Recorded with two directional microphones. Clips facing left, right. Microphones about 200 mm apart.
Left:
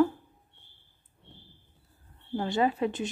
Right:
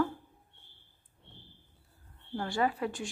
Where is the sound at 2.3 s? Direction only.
20° left (ahead or behind).